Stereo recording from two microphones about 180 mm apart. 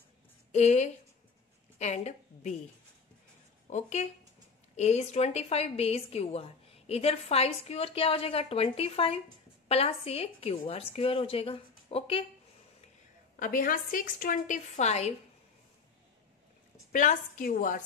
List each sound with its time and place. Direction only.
0.5 s a woman's voice: 40° left (ahead or behind)
3.7 s a woman's voice: 40° left (ahead or behind)
13.4 s a woman's voice: 50° left (ahead or behind)
16.9 s a woman's voice: 45° left (ahead or behind)